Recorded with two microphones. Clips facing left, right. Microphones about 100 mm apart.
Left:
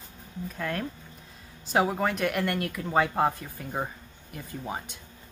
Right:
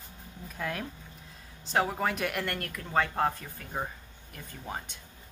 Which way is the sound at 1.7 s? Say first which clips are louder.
Left 3 dB; 5° left (ahead or behind).